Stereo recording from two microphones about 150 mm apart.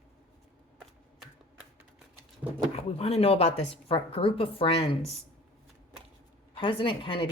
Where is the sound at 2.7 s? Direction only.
40° left (ahead or behind).